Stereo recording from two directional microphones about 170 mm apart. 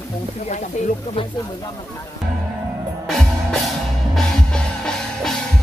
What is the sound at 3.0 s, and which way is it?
Music, centre (ahead or behind).